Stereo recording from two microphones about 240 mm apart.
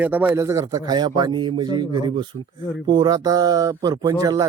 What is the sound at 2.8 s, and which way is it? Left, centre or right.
Speech, centre.